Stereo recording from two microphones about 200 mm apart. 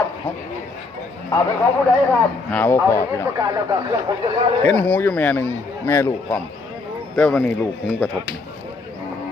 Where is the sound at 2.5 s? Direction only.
10° left (ahead or behind).